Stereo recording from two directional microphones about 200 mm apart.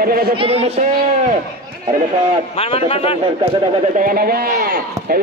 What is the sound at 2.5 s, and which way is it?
Speech, 30° left (ahead or behind).